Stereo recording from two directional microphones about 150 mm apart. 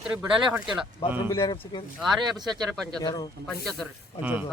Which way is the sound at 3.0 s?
30° left (ahead or behind).